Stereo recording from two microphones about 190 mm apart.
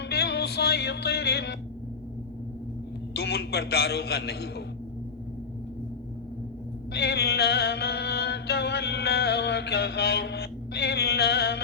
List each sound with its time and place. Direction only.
0.0 s music: 60° left (ahead or behind)
3.1 s a man's voice: 60° left (ahead or behind)
6.9 s music: 60° left (ahead or behind)